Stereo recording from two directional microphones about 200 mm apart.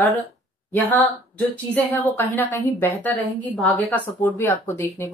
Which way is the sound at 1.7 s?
10° left (ahead or behind).